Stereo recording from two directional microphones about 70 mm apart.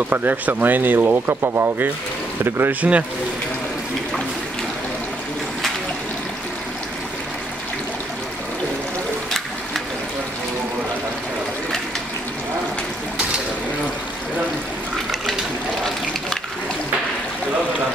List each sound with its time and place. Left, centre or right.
0.1 s speech: right
2.8 s speech: right
15.8 s water: centre